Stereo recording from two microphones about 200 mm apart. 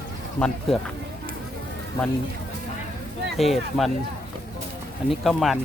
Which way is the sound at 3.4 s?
Centre (ahead or behind).